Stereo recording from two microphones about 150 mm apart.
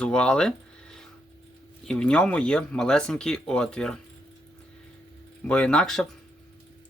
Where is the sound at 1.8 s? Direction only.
5° left (ahead or behind).